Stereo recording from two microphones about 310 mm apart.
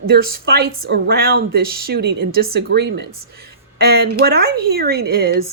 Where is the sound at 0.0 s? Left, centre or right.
Right.